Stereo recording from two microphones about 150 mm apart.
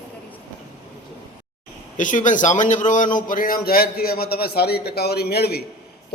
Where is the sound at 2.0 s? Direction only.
60° left (ahead or behind).